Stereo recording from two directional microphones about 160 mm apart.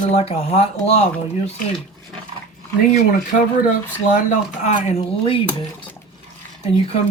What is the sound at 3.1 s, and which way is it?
Speech, 55° left (ahead or behind).